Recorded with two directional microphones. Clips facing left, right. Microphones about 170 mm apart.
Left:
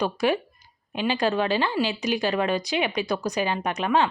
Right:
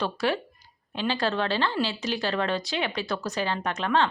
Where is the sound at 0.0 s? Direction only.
15° left (ahead or behind).